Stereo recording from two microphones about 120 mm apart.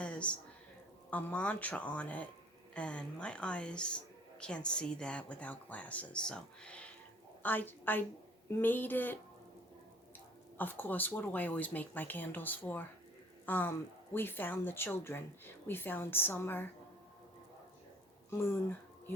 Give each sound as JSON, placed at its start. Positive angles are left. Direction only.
{"t": 0.0, "sound": "a sound", "side_deg": 10}
{"t": 1.1, "sound": "a woman's voice", "side_deg": 10}
{"t": 10.6, "sound": "speech", "side_deg": 15}